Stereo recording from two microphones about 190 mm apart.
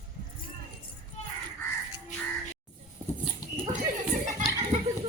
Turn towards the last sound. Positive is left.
turn(degrees=-35)  # may be behind; listen again after turning